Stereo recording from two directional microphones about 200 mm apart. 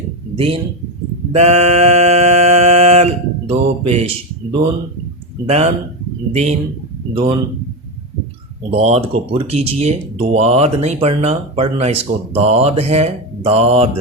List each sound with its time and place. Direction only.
0.3 s speech: 30° right (ahead or behind)
1.3 s a sound: 35° right (ahead or behind)
5.5 s speech: 35° right (ahead or behind)
8.7 s speech: 30° right (ahead or behind)